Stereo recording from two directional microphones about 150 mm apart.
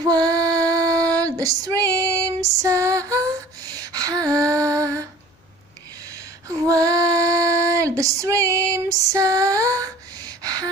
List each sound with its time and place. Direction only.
0.0 s music: 25° right (ahead or behind)
0.7 s a sound: 25° right (ahead or behind)
1.1 s female singing: 25° right (ahead or behind)
6.6 s female singing: 25° right (ahead or behind)